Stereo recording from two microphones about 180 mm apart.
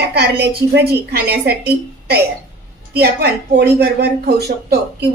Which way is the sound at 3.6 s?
60° right (ahead or behind).